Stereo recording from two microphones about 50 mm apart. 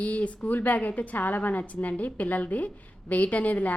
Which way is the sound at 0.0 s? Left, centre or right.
Left.